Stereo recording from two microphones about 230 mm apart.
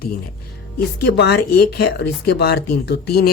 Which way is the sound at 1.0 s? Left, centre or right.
Left.